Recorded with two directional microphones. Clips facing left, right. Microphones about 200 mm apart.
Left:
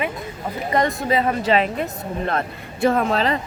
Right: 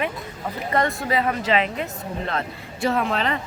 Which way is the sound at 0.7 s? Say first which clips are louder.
Left 3 dB; 20° left (ahead or behind).